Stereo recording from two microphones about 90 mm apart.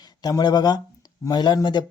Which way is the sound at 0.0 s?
50° left (ahead or behind).